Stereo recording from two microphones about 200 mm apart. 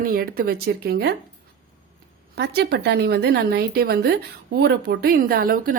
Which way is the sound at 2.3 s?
55° right (ahead or behind).